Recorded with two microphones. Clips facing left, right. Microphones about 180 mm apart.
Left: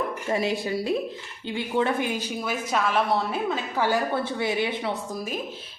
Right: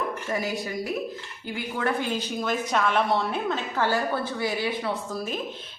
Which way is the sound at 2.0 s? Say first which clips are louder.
Even; 10° left (ahead or behind).